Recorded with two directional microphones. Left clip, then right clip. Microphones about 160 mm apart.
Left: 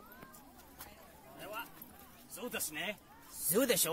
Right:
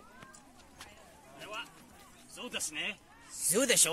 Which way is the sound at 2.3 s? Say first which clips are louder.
Right 3 dB; 60° left (ahead or behind).